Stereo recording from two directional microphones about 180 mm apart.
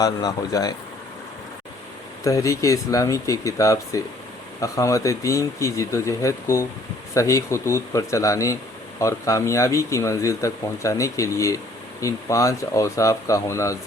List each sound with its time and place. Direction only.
0.0 s speech: 20° left (ahead or behind)
2.2 s speech: 15° left (ahead or behind)